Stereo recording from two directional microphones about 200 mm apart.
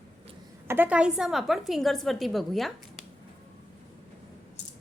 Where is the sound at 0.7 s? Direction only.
10° right (ahead or behind).